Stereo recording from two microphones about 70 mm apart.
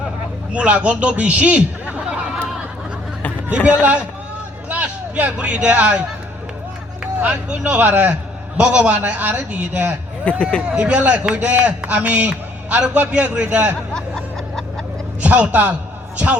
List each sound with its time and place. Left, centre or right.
0.5 s a man's voice: centre
3.7 s a man's voice: centre
10.3 s speech: centre
10.7 s speech: centre
13.9 s snicker: centre
15.2 s a man's voice: centre